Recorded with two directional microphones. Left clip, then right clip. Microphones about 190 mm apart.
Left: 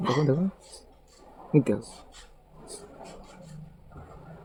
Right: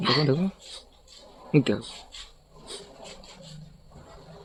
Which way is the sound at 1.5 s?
5° right (ahead or behind).